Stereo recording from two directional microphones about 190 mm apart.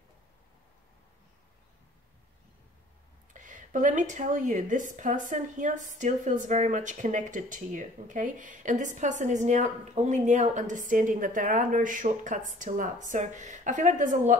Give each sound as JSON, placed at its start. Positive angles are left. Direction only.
{"t": 3.3, "sound": "a woman's voice", "side_deg": -40}